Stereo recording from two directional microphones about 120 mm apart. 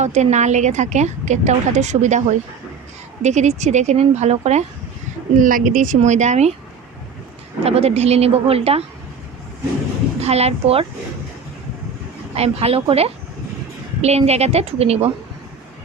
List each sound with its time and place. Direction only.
0.0 s a woman's voice: 75° right (ahead or behind)
3.2 s speech: 75° right (ahead or behind)
5.4 s a woman's voice: 90° right; by 6.5 s 75° right (ahead or behind)
7.6 s speech: 60° right (ahead or behind)
10.2 s speech: 60° right (ahead or behind)
12.4 s speech: 60° right (ahead or behind)